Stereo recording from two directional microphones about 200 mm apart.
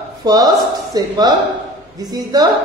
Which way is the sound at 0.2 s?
20° right (ahead or behind).